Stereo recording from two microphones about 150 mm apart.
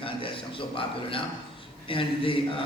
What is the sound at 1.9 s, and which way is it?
Speech, 35° left (ahead or behind).